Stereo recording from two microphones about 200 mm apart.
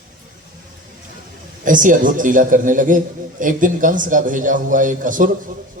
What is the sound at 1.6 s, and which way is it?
A man's voice, 40° right (ahead or behind).